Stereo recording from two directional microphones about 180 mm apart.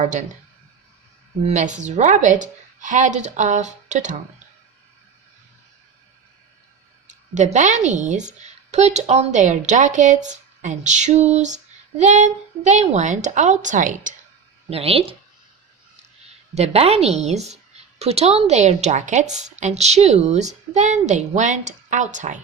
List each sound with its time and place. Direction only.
0.0 s a woman's voice: 45° right (ahead or behind)
1.5 s a woman's voice: 40° right (ahead or behind)
7.3 s a woman's voice: 40° right (ahead or behind)
14.7 s a woman's voice: 35° right (ahead or behind)
16.6 s a woman's voice: 35° right (ahead or behind)